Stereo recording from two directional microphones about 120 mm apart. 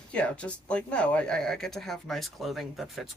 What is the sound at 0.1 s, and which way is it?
Speech, 10° left (ahead or behind).